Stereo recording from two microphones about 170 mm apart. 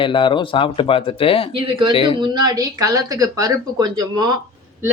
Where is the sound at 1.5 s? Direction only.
30° right (ahead or behind).